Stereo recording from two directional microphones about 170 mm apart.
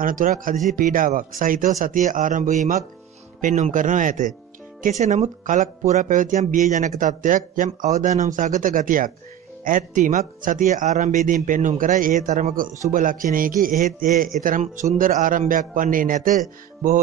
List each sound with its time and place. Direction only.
0.0 s a man's voice: 55° right (ahead or behind)